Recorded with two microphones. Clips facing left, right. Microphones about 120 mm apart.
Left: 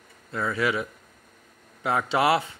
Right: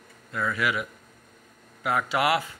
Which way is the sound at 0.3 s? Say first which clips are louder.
Left 2 dB; 30° left (ahead or behind).